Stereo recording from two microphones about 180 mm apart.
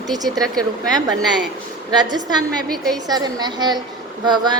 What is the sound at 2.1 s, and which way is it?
A woman's voice, 20° right (ahead or behind).